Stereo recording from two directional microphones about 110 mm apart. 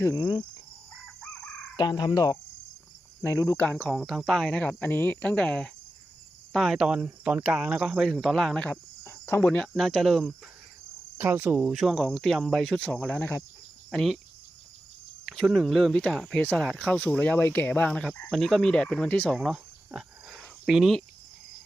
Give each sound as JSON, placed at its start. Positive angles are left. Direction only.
{"t": 0.0, "sound": "cricket", "side_deg": 35}
{"t": 1.7, "sound": "speech", "side_deg": 45}
{"t": 3.6, "sound": "speech", "side_deg": 10}
{"t": 3.8, "sound": "speech", "side_deg": 0}
{"t": 9.0, "sound": "cricket", "side_deg": 25}
{"t": 9.5, "sound": "speech", "side_deg": 5}
{"t": 11.2, "sound": "speech", "side_deg": -15}
{"t": 13.9, "sound": "speech", "side_deg": 5}
{"t": 15.3, "sound": "speech", "side_deg": 0}
{"t": 19.4, "sound": "cricket", "side_deg": -5}